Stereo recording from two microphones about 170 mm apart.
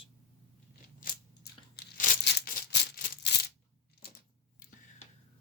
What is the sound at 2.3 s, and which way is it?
Maraca, 70° left (ahead or behind).